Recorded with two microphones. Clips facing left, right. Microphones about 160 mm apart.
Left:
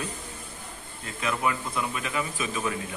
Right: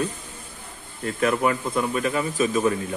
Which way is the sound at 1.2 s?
50° right (ahead or behind).